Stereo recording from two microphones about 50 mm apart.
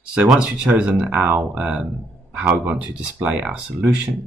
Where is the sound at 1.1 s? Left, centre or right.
Right.